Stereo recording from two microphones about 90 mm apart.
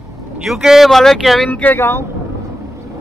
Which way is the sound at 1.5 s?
20° left (ahead or behind).